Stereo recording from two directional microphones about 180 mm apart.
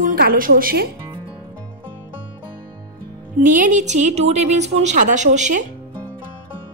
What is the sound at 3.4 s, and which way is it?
A woman's voice, 45° right (ahead or behind).